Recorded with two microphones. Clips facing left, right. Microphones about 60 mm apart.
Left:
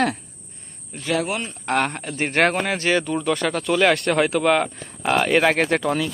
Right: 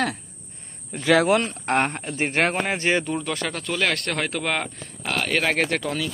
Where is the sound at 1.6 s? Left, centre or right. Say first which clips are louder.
Left 3 dB; right.